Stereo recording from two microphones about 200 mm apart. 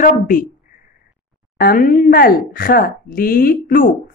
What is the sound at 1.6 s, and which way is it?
Speech, 45° left (ahead or behind).